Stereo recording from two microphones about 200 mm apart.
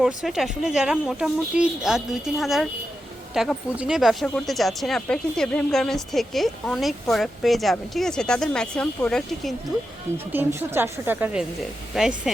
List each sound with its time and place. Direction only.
0.0 s speech: centre (ahead or behind)
10.3 s a woman's voice: 10° right (ahead or behind)